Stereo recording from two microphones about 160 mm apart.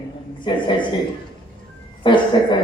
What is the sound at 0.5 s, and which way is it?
Speech, 30° left (ahead or behind).